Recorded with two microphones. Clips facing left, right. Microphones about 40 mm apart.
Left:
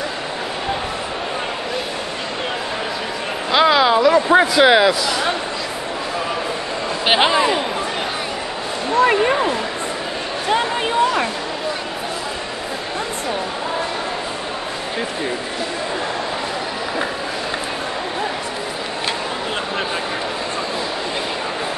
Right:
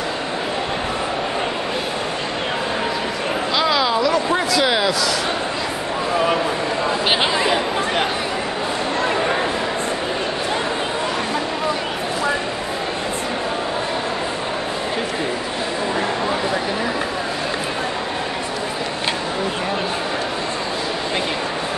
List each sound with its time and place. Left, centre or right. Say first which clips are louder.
3.5 s speech: left 6 dB; centre
7.1 s speech: left 6 dB; centre